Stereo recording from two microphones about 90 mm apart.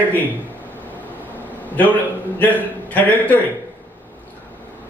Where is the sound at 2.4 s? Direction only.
20° left (ahead or behind).